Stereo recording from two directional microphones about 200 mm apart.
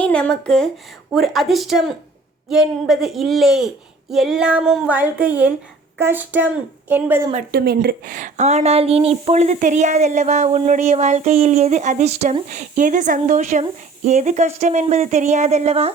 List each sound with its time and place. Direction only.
0.0 s child singing: 5° left (ahead or behind)
6.0 s a woman's voice: 10° right (ahead or behind)
7.5 s a woman's voice: 50° right (ahead or behind); by 15.9 s 30° right (ahead or behind)